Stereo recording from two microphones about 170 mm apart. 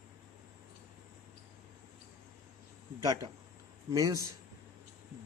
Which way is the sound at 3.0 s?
20° right (ahead or behind).